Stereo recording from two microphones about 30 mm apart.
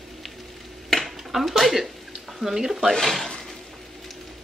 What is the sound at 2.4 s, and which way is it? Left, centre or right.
Speech, centre.